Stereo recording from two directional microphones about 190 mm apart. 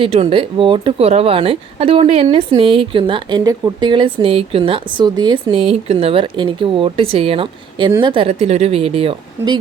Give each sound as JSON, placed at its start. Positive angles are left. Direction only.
{"t": 0.0, "sound": "speech", "side_deg": -30}